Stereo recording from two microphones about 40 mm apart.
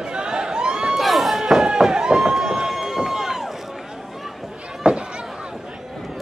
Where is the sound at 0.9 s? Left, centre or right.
Centre.